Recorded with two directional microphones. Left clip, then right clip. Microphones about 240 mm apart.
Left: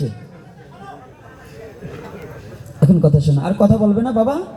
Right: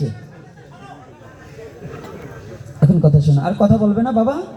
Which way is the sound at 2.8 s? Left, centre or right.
Left.